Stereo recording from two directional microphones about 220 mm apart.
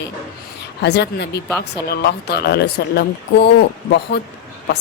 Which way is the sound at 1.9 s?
45° left (ahead or behind).